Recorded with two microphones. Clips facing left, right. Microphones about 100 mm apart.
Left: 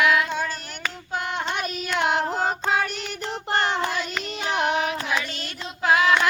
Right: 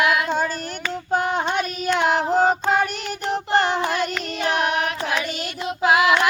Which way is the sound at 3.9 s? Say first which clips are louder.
Right 4 dB; 55° right (ahead or behind).